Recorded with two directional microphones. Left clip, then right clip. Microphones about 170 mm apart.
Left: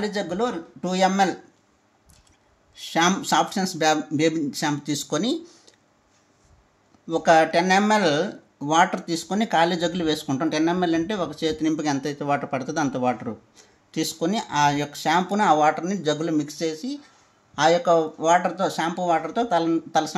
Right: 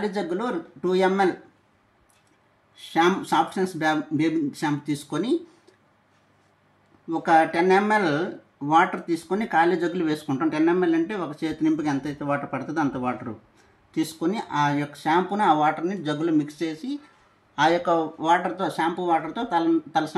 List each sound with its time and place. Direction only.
0.0 s speech: 55° left (ahead or behind)
2.8 s speech: 55° left (ahead or behind)
7.1 s speech: 65° left (ahead or behind); by 12.3 s 50° left (ahead or behind)
12.3 s speech: 60° left (ahead or behind)
14.2 s speech: 55° left (ahead or behind)
17.6 s a man's voice: 40° left (ahead or behind)
18.3 s speech: 50° left (ahead or behind)